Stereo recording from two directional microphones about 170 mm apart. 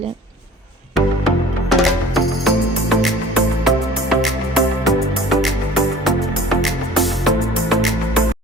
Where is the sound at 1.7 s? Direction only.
Centre (ahead or behind).